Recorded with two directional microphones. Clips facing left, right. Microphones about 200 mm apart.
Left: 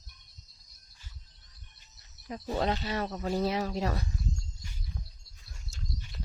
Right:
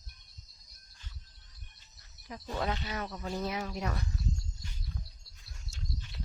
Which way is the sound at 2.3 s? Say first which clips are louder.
Left 5 dB; 25° left (ahead or behind).